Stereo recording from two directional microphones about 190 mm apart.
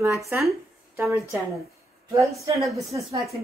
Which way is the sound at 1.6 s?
15° right (ahead or behind).